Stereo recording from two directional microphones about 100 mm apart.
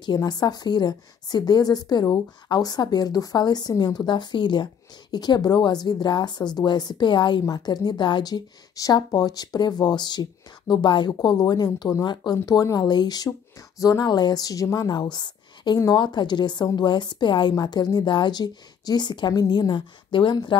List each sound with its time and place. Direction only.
0.0 s a woman's voice: 45° left (ahead or behind)